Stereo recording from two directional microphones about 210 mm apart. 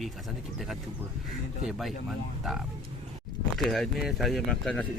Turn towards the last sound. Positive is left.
turn(degrees=5)  # may be behind; listen again after turning